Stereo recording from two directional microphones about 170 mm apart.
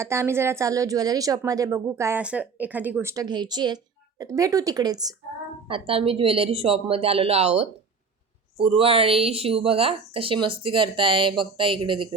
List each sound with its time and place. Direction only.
0.0 s a woman's voice: 15° right (ahead or behind)
5.6 s speech: 30° right (ahead or behind)